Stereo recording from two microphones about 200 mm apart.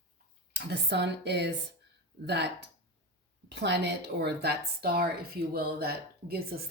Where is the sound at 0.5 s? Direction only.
60° right (ahead or behind).